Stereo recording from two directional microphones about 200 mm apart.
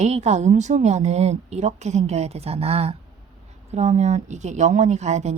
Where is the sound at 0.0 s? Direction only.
35° right (ahead or behind).